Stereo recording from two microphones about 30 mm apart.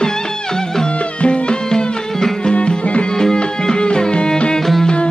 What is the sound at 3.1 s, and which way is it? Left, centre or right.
Music, left.